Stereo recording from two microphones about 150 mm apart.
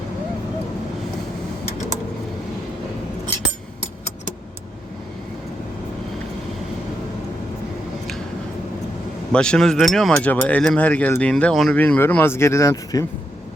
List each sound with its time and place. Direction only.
9.3 s speech: 5° left (ahead or behind); by 13.1 s 25° left (ahead or behind)